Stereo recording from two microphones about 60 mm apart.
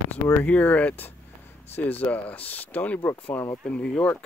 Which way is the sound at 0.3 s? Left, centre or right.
Left.